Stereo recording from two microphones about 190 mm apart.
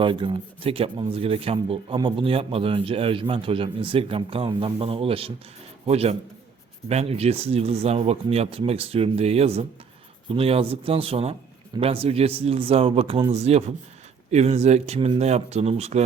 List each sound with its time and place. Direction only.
0.0 s speech: 25° right (ahead or behind)